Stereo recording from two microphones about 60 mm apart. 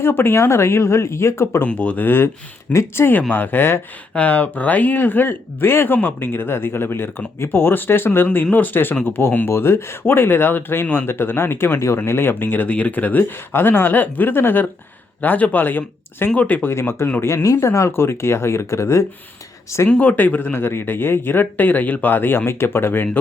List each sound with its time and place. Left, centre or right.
0.0 s speech: left
1.6 s speech: left
3.2 s speech: left
4.1 s speech: left
12.6 s speech: left
16.3 s speech: left
16.6 s speech: left
20.0 s speech: left